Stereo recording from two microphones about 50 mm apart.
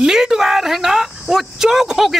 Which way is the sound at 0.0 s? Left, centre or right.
Centre.